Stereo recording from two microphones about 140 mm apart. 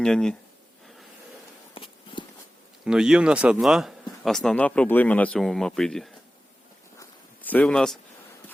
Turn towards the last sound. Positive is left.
turn(degrees=5)  # may be behind; listen again after turning